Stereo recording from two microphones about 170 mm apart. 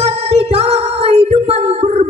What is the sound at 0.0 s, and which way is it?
Music, 35° right (ahead or behind).